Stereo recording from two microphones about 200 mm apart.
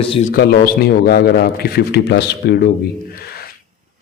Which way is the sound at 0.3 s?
50° left (ahead or behind).